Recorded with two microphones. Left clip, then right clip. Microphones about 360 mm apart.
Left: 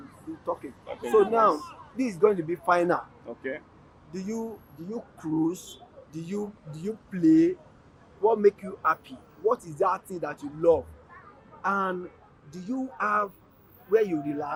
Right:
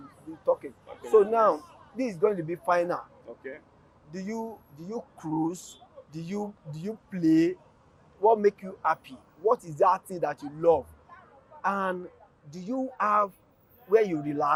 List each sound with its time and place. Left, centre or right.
1.1 s speech: centre
3.2 s a sound: left
4.1 s speech: centre